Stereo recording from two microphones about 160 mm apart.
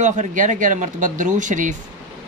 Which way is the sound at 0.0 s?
50° right (ahead or behind).